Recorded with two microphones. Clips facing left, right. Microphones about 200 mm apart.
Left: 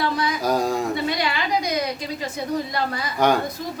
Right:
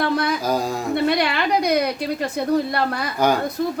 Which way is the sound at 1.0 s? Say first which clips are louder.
Right 5 dB; 60° right (ahead or behind).